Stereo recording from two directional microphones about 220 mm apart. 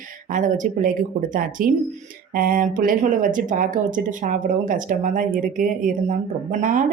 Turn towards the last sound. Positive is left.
turn(degrees=-35)  # may be behind; listen again after turning